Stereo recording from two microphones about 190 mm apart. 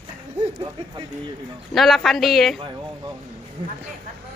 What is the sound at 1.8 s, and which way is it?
Speech, centre (ahead or behind).